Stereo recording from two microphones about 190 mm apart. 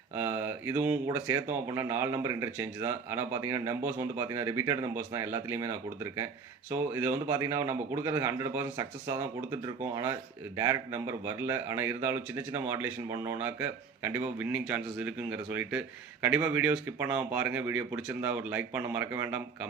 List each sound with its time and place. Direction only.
0.2 s mantra: 10° right (ahead or behind)
1.0 s speech: 15° right (ahead or behind)
6.9 s speech: 20° right (ahead or behind)